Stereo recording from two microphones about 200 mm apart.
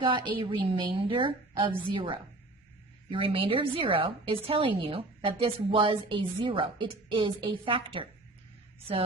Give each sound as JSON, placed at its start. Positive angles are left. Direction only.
{"t": 0.0, "sound": "a woman's voice", "side_deg": -25}